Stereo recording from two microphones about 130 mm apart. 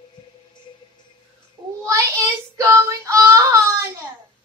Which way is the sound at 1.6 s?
30° right (ahead or behind).